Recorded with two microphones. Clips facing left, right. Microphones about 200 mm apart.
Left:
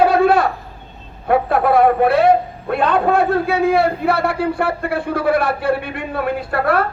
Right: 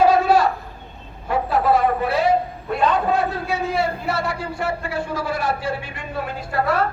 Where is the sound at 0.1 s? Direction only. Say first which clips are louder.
Left 2 dB; 60° left (ahead or behind).